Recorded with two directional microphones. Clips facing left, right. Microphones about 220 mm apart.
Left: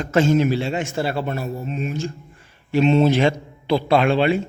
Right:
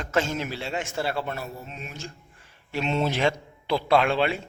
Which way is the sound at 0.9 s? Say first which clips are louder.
Left 5 dB; 25° left (ahead or behind).